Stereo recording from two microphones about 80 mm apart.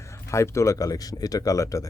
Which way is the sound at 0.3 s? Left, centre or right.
Left.